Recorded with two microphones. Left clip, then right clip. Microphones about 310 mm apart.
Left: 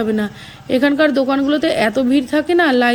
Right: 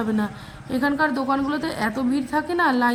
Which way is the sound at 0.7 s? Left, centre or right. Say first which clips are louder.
Left 8 dB; centre.